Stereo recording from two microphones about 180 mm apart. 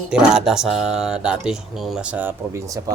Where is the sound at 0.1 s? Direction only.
5° right (ahead or behind).